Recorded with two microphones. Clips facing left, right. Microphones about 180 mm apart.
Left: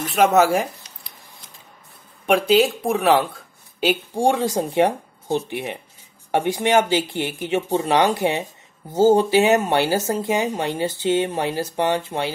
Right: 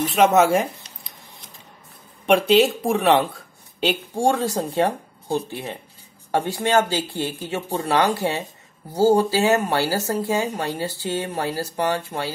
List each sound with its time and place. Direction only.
0.0 s speech: centre (ahead or behind)
2.2 s speech: centre (ahead or behind)
4.1 s speech: 20° left (ahead or behind)